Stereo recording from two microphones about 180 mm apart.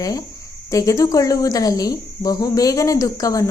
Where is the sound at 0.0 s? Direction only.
20° left (ahead or behind).